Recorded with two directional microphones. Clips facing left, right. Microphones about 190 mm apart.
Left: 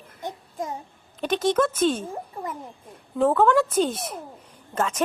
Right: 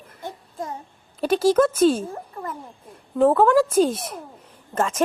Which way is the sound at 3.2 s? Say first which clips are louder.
Right 3 dB; 5° right (ahead or behind).